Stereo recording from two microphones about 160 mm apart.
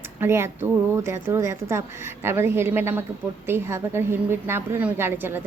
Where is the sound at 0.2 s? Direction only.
15° right (ahead or behind).